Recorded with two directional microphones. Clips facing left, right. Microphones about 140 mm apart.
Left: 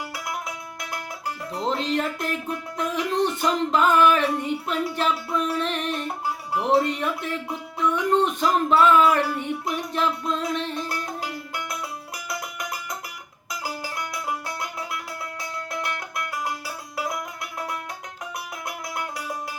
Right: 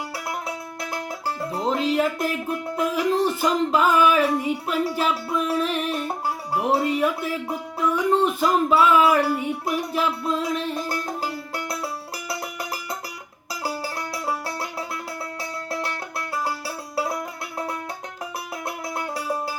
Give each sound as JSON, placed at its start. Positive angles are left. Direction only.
{"t": 0.1, "sound": "music", "side_deg": -30}
{"t": 1.7, "sound": "speech", "side_deg": -5}
{"t": 3.4, "sound": "music", "side_deg": -5}
{"t": 9.6, "sound": "speech", "side_deg": -5}
{"t": 10.8, "sound": "music", "side_deg": -35}